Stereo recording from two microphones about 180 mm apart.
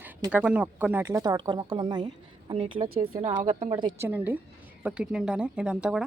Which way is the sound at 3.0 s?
40° right (ahead or behind).